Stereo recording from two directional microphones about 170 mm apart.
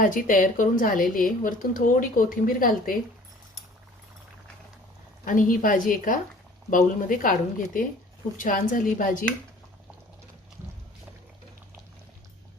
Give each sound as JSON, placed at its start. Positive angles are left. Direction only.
{"t": 0.0, "sound": "a woman's voice", "side_deg": 50}
{"t": 5.2, "sound": "a woman's voice", "side_deg": 50}